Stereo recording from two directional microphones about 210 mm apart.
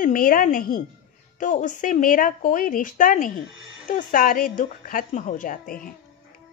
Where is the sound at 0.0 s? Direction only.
40° left (ahead or behind).